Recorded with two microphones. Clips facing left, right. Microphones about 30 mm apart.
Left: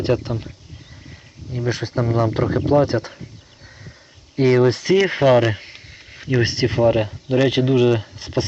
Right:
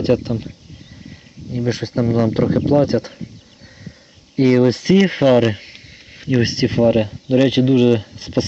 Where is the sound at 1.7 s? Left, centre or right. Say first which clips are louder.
Right 1 dB; right.